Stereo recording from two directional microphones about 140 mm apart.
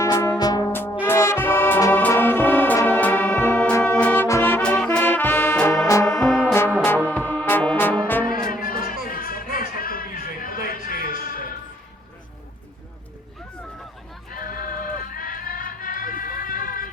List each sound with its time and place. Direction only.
0.0 s music: 20° left (ahead or behind)
8.3 s music: 90° left
14.3 s music: 90° left